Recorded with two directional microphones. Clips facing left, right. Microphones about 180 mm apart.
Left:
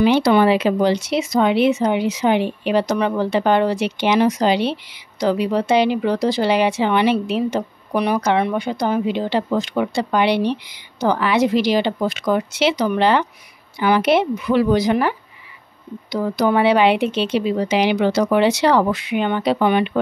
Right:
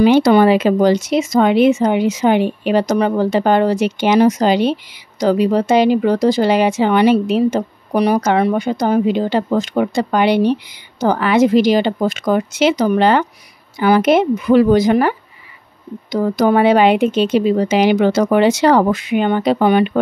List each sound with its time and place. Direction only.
0.0 s speech: 45° right (ahead or behind)